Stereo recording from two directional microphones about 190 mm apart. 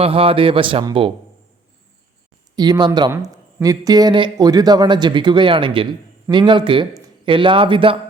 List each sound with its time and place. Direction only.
0.0 s a man's voice: 30° right (ahead or behind)
2.6 s a man's voice: 20° right (ahead or behind)